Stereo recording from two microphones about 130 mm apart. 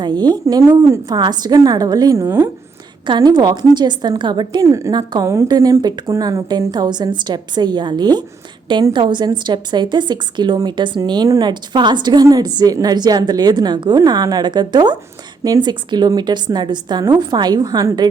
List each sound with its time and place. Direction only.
0.0 s a woman's voice: 30° right (ahead or behind)
3.1 s a woman's voice: 30° right (ahead or behind)
4.6 s a woman's voice: 25° right (ahead or behind)